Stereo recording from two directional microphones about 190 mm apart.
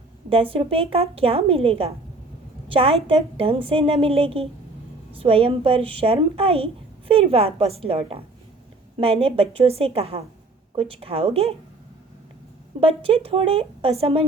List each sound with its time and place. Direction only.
0.3 s a woman's voice: 30° right (ahead or behind)
12.8 s a woman's voice: 30° right (ahead or behind)